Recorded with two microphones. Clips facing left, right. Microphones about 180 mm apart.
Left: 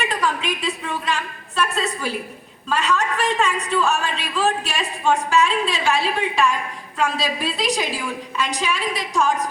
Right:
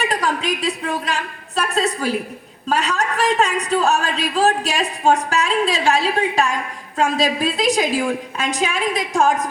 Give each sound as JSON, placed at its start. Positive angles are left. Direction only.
{"t": 0.0, "sound": "a woman's voice", "side_deg": -40}